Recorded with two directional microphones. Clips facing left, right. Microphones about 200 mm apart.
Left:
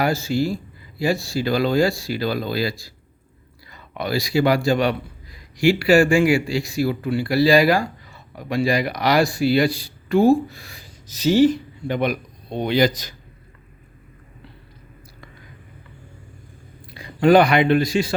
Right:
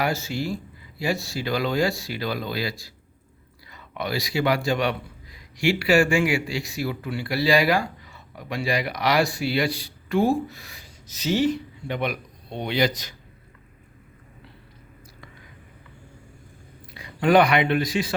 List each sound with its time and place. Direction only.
0.0 s speech: 35° left (ahead or behind)
16.9 s speech: 35° left (ahead or behind)